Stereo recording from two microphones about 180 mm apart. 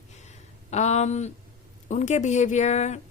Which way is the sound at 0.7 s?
40° left (ahead or behind).